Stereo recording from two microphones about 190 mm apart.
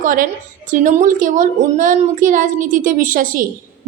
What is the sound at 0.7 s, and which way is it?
A woman's voice, 45° right (ahead or behind).